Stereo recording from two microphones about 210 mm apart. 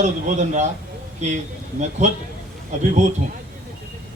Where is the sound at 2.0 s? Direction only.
35° right (ahead or behind).